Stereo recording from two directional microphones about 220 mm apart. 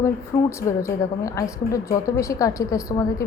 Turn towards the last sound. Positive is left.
turn(degrees=15)  # may be behind; listen again after turning